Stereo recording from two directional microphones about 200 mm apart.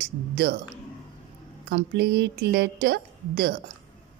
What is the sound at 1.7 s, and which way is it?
A woman's voice, 55° right (ahead or behind).